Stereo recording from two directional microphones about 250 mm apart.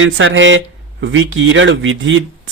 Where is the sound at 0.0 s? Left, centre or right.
Right.